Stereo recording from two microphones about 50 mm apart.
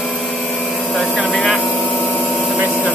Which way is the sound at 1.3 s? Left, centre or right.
Centre.